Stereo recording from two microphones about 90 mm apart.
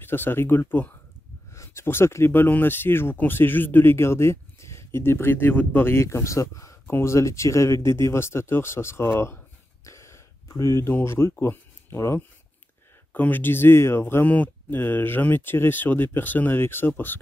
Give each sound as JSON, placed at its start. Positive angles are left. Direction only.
{"t": 0.0, "sound": "speech", "side_deg": 25}
{"t": 1.5, "sound": "speech", "side_deg": 30}
{"t": 9.8, "sound": "a sound", "side_deg": 35}
{"t": 11.3, "sound": "speech", "side_deg": 25}
{"t": 14.2, "sound": "speech", "side_deg": 15}